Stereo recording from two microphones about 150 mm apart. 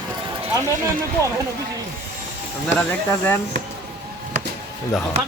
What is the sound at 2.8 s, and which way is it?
Speech, 10° left (ahead or behind).